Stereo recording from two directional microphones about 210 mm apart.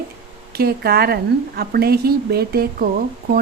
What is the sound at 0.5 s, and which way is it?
A woman's voice, 45° right (ahead or behind).